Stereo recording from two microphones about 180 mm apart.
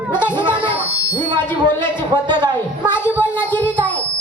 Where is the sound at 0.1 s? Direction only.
10° left (ahead or behind).